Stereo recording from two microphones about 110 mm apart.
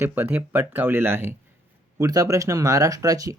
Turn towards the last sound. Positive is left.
turn(degrees=-30)  # may be behind; listen again after turning